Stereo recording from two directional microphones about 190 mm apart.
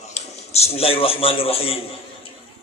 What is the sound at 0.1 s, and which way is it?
A man's voice, 35° left (ahead or behind).